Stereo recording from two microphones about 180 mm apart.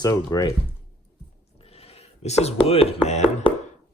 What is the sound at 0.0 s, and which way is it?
Speech, 25° left (ahead or behind).